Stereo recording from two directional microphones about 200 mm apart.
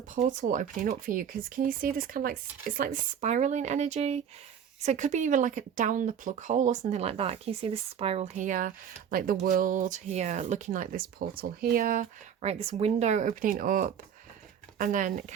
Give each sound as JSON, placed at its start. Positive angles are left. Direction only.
{"t": 0.2, "sound": "speech", "side_deg": -40}
{"t": 12.4, "sound": "speech", "side_deg": -30}